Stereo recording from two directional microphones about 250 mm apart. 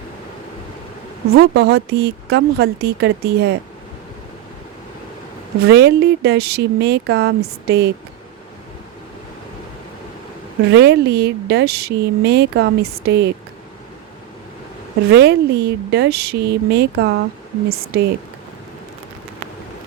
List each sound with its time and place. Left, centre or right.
1.3 s a woman's voice: right
5.6 s a woman's voice: right
10.7 s a woman's voice: right
15.1 s a woman's voice: right